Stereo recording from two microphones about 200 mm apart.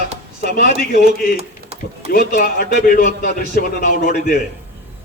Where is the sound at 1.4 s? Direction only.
30° right (ahead or behind).